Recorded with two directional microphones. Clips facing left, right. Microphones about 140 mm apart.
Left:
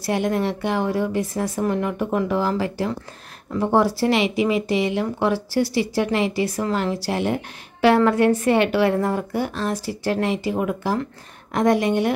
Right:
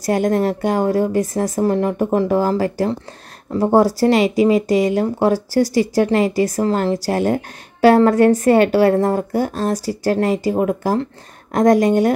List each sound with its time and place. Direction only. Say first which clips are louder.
0.0 s a woman's voice: right 5 dB; 40° right (ahead or behind)